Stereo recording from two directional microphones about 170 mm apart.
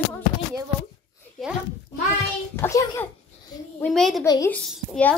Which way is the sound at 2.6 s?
15° left (ahead or behind).